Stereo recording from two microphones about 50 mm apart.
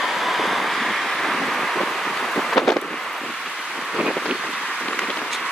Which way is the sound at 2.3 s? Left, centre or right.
Centre.